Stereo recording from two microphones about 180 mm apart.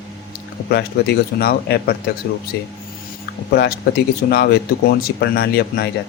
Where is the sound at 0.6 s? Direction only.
65° left (ahead or behind).